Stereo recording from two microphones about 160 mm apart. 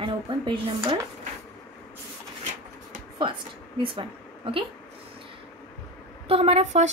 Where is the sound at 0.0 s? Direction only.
30° right (ahead or behind).